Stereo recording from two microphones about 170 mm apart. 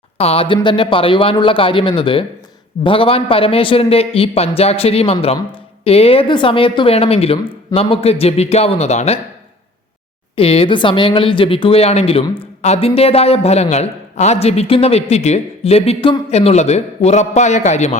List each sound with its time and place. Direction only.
0.2 s a man's voice: 35° left (ahead or behind)
10.3 s a man's voice: 35° left (ahead or behind)